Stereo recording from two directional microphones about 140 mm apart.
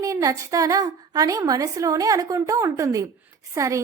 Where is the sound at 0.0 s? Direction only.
25° right (ahead or behind).